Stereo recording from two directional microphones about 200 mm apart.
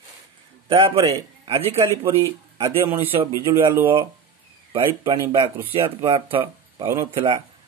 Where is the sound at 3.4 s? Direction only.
10° right (ahead or behind).